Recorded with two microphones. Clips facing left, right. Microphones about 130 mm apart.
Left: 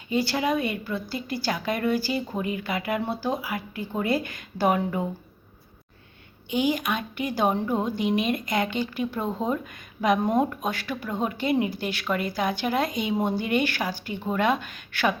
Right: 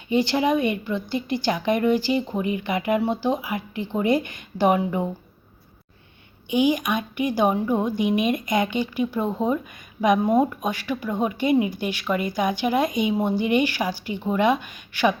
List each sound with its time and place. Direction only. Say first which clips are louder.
0.1 s a woman's voice: right 4 dB; 20° right (ahead or behind)
6.5 s speech: right 4 dB; 15° right (ahead or behind)